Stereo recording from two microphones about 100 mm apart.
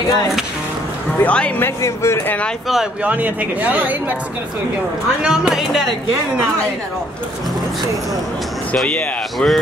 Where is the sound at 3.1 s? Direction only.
15° right (ahead or behind).